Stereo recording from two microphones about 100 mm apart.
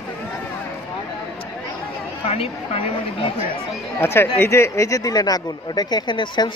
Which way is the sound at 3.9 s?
25° left (ahead or behind).